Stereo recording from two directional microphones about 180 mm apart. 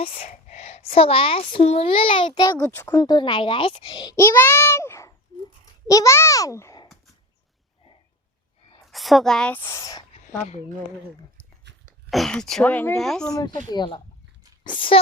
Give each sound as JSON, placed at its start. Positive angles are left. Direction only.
{"t": 0.2, "sound": "a child's voice", "side_deg": 40}
{"t": 2.6, "sound": "a child's voice", "side_deg": 10}
{"t": 4.2, "sound": "a child's voice", "side_deg": 15}
{"t": 8.9, "sound": "a woman's voice", "side_deg": 0}
{"t": 11.7, "sound": "a sound", "side_deg": -75}
{"t": 12.1, "sound": "a woman's voice", "side_deg": 0}
{"t": 13.3, "sound": "a child's voice", "side_deg": 25}